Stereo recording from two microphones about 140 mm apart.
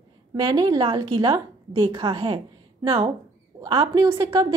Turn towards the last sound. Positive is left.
turn(degrees=-25)  # may be behind; listen again after turning